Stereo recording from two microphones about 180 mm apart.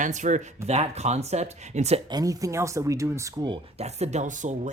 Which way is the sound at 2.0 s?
20° right (ahead or behind).